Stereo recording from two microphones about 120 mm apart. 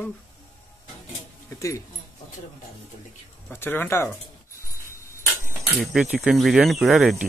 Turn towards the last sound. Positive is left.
turn(degrees=-5)  # may be behind; listen again after turning